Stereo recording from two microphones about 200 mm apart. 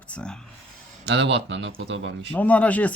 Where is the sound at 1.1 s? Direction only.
60° right (ahead or behind).